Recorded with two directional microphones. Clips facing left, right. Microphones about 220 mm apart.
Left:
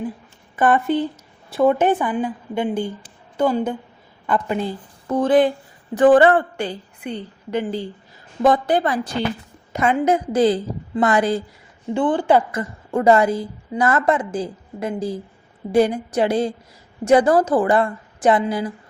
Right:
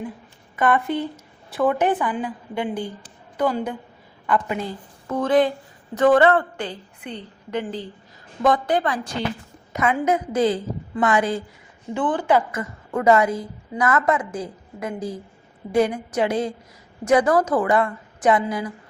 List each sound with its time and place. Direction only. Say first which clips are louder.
0.5 s a woman's voice: left 3 dB; 30° left (ahead or behind)
8.4 s a woman's voice: left 3 dB; 30° left (ahead or behind)